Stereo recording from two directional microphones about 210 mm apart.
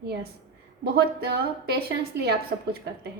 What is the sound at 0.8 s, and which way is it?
A woman's voice, 50° right (ahead or behind).